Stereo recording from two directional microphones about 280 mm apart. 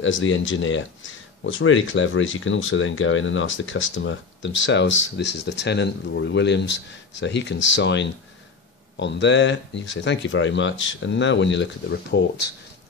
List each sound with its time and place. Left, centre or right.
0.0 s speech: left